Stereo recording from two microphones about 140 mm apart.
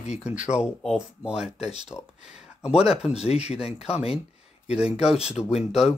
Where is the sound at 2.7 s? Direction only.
45° left (ahead or behind).